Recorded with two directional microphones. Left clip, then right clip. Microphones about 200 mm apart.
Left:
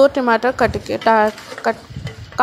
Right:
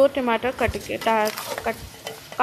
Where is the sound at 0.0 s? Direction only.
25° left (ahead or behind).